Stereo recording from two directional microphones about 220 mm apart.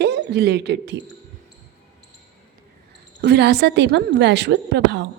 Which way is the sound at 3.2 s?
50° right (ahead or behind).